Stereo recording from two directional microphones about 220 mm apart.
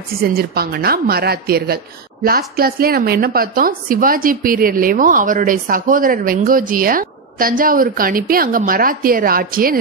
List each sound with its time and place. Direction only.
0.2 s a woman's voice: 45° right (ahead or behind)